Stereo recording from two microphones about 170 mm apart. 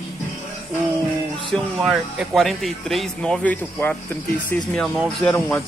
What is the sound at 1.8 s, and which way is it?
Speech, centre (ahead or behind).